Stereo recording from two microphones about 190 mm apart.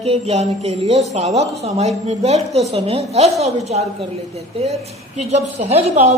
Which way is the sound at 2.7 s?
35° right (ahead or behind).